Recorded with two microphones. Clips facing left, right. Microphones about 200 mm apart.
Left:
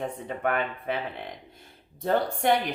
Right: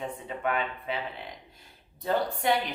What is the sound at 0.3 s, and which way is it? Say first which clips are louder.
Speech: left 2 dB; 50° left (ahead or behind).